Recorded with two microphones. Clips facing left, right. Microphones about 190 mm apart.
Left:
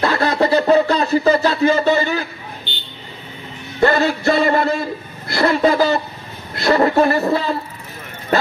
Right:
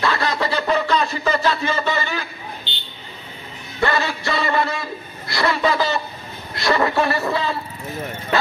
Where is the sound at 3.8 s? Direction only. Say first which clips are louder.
Left 7 dB; 50° left (ahead or behind).